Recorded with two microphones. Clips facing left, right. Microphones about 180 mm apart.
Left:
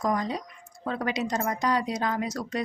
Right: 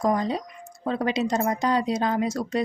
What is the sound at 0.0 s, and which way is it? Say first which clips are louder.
Speech: right 4 dB; 25° right (ahead or behind).